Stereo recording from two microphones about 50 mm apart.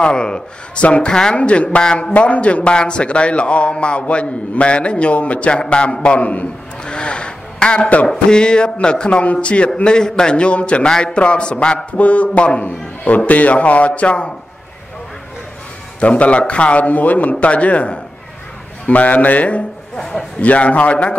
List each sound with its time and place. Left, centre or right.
0.0 s a man's voice: centre
2.1 s a man's voice: left
6.8 s a sound: centre
8.1 s a man's voice: centre
16.0 s a man's voice: left
20.0 s a man's voice: centre
20.3 s a man's voice: left